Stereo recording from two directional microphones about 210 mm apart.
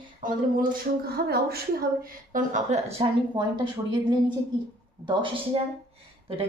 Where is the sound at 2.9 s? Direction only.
20° right (ahead or behind).